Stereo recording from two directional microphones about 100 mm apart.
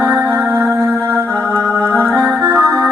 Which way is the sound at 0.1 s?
25° right (ahead or behind).